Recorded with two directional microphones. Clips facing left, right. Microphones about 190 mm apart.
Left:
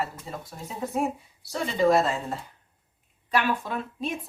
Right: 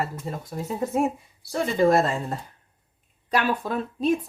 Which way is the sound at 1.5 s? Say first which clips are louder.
Right 2 dB; 50° right (ahead or behind).